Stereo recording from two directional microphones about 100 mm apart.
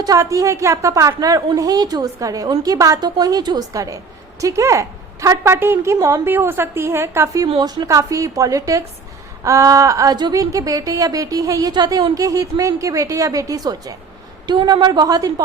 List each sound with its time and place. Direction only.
0.0 s a woman's voice: 35° right (ahead or behind)
6.2 s a woman's voice: 25° right (ahead or behind)
7.6 s a woman's voice: 35° right (ahead or behind)